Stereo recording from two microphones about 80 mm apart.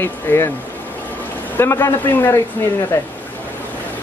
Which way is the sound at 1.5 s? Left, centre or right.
Left.